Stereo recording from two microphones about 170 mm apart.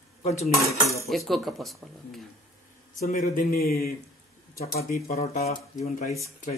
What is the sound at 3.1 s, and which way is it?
Speech, 60° left (ahead or behind).